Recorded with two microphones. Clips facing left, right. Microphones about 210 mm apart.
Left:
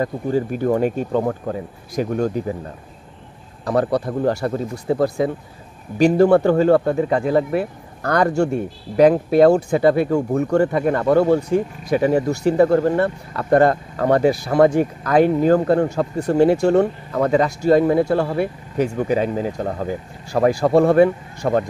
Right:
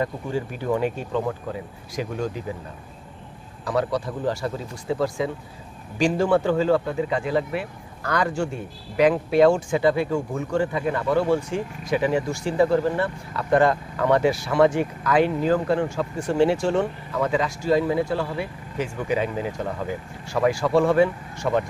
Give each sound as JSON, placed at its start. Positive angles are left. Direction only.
{"t": 0.0, "sound": "speech", "side_deg": 45}
{"t": 3.6, "sound": "speech", "side_deg": 45}
{"t": 6.4, "sound": "speech", "side_deg": 60}
{"t": 11.5, "sound": "speech", "side_deg": 40}